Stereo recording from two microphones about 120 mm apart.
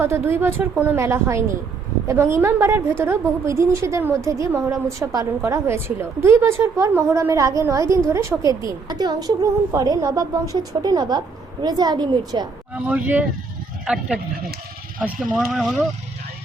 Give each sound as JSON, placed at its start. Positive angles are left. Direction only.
{"t": 0.0, "sound": "a woman's voice", "side_deg": -20}
{"t": 12.7, "sound": "speech", "side_deg": -10}